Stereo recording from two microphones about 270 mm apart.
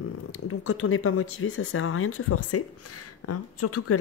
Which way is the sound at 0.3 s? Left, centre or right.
Left.